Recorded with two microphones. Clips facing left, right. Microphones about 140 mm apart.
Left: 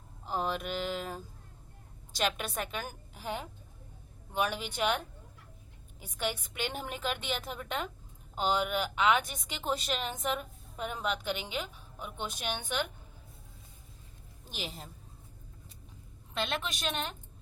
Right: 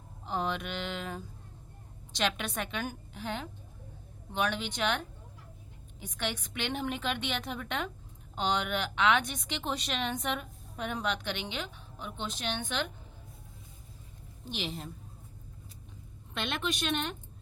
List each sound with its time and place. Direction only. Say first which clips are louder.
0.3 s a woman's voice: even; 5° left (ahead or behind)
14.5 s a woman's voice: right 4 dB; 5° left (ahead or behind)
16.3 s a woman's voice: right 1 dB; centre (ahead or behind)